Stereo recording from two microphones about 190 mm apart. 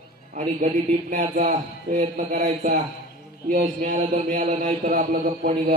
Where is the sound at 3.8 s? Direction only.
40° right (ahead or behind).